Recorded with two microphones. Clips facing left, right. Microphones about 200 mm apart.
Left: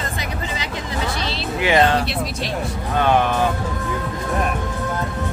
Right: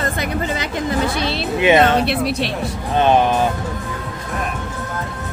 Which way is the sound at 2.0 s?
65° right (ahead or behind).